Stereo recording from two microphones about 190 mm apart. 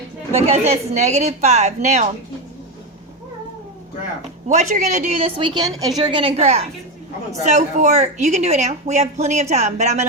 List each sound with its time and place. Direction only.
0.3 s a woman's voice: 35° right (ahead or behind)
4.4 s a woman's voice: 40° right (ahead or behind)